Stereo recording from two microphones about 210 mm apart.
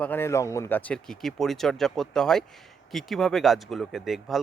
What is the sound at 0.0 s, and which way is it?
Speech, 10° left (ahead or behind).